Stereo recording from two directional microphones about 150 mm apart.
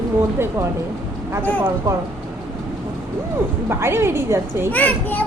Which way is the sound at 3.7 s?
15° right (ahead or behind).